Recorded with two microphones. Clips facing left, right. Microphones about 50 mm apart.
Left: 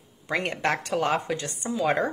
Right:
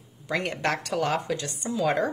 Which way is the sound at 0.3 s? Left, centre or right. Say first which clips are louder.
Left 1 dB; left.